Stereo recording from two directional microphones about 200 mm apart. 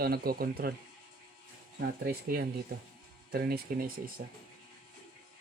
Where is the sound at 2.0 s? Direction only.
50° right (ahead or behind).